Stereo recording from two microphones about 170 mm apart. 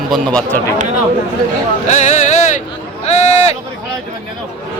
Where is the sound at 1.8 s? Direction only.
45° left (ahead or behind).